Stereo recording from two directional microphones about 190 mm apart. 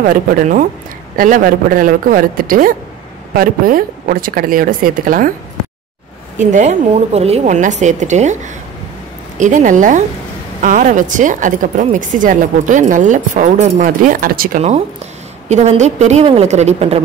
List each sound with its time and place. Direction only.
0.0 s speech: 45° right (ahead or behind)
6.3 s a woman's voice: 40° right (ahead or behind)
9.4 s a woman's voice: 40° right (ahead or behind)
15.4 s a woman's voice: 35° right (ahead or behind)